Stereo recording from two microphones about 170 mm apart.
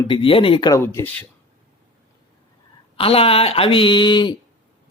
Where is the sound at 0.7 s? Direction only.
15° left (ahead or behind).